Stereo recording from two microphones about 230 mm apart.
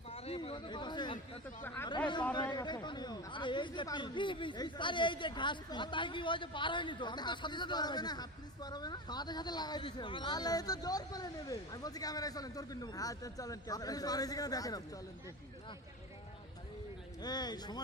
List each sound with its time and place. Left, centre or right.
0.1 s speech: left
17.2 s speech: centre